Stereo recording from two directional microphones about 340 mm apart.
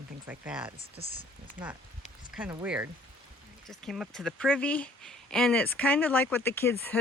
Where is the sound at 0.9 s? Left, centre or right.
Centre.